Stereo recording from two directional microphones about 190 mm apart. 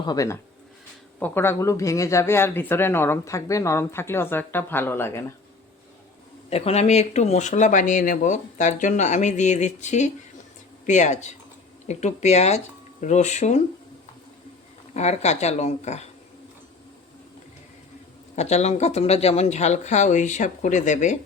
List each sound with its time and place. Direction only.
0.0 s speech: 20° left (ahead or behind)
6.5 s speech: 35° left (ahead or behind)
14.9 s speech: 35° left (ahead or behind)
18.3 s speech: 35° left (ahead or behind)